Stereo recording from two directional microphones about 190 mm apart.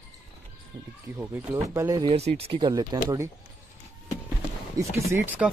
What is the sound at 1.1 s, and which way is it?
Speech, 10° right (ahead or behind).